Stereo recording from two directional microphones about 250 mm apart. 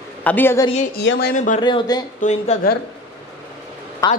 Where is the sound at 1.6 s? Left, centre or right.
Centre.